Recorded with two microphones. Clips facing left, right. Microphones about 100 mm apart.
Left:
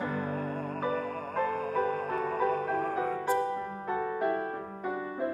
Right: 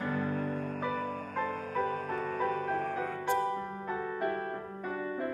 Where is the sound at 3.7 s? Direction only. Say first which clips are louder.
Left 3 dB; 20° left (ahead or behind).